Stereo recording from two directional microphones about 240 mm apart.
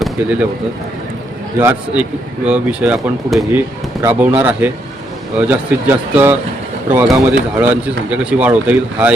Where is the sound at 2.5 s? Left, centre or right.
Centre.